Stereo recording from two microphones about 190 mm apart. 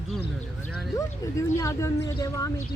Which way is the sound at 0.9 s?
15° left (ahead or behind).